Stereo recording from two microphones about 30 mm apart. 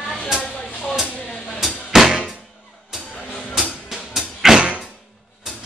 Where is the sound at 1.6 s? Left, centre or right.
Centre.